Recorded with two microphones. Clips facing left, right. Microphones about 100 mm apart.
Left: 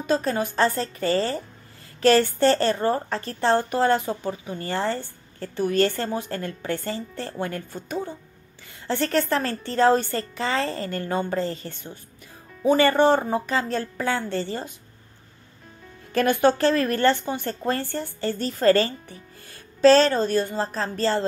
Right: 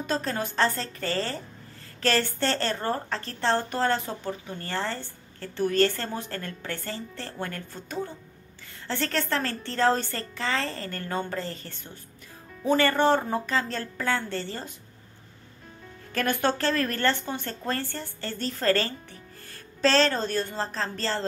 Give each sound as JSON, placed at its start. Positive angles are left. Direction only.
{"t": 0.0, "sound": "a woman's voice", "side_deg": 10}
{"t": 16.1, "sound": "a woman's voice", "side_deg": 20}